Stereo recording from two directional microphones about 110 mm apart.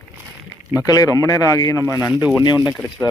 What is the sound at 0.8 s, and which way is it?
Speech, 30° left (ahead or behind).